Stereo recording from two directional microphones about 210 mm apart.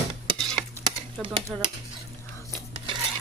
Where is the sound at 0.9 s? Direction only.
25° right (ahead or behind).